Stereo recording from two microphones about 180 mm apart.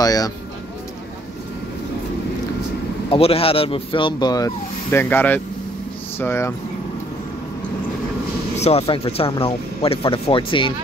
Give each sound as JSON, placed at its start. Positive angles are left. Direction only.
{"t": 0.0, "sound": "speech", "side_deg": 20}
{"t": 3.1, "sound": "speech", "side_deg": 30}
{"t": 4.9, "sound": "speech", "side_deg": 10}
{"t": 8.5, "sound": "speech", "side_deg": 35}